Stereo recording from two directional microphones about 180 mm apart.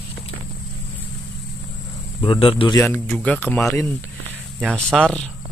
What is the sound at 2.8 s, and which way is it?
Speech, 10° left (ahead or behind).